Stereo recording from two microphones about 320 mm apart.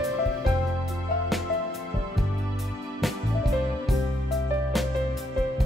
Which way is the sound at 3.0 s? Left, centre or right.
Centre.